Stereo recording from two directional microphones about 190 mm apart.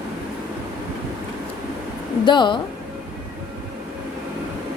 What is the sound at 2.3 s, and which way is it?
Speech, 25° left (ahead or behind).